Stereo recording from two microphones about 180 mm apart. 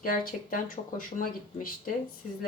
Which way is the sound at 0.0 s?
50° left (ahead or behind).